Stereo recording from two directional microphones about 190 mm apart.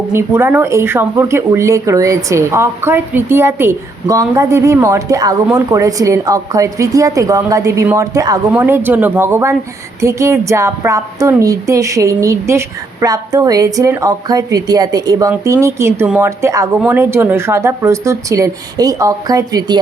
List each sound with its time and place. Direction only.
0.1 s speech: 10° right (ahead or behind)